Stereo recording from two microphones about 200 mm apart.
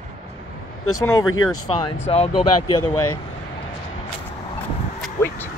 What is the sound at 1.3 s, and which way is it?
Speech, 90° left.